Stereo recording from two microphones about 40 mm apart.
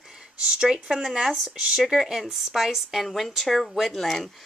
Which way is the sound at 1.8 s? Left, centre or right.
Centre.